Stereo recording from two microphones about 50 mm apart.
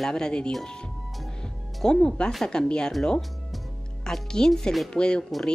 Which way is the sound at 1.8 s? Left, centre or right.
Centre.